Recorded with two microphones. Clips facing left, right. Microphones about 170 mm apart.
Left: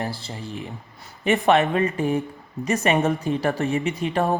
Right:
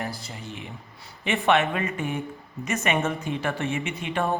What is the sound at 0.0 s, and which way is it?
Speech, 30° left (ahead or behind).